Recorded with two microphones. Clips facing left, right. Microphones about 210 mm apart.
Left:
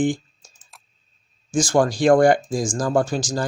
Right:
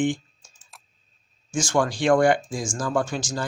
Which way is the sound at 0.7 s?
Centre (ahead or behind).